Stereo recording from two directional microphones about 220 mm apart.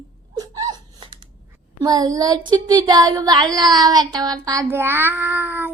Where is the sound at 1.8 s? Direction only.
15° right (ahead or behind).